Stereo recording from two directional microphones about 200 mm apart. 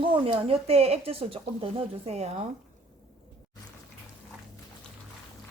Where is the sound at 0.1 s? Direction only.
30° right (ahead or behind).